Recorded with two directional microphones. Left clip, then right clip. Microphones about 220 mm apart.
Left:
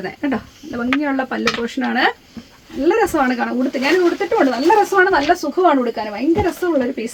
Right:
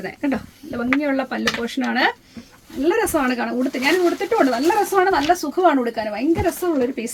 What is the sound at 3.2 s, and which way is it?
Speech, 20° left (ahead or behind).